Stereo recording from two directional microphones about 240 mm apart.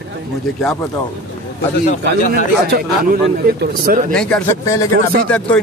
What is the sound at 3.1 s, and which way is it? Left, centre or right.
Speech, right.